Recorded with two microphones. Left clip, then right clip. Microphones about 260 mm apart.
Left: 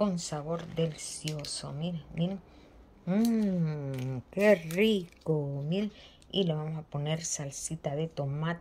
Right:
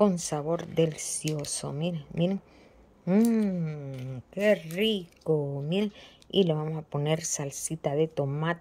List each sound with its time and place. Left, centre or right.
0.0 s speech: centre
5.3 s speech: centre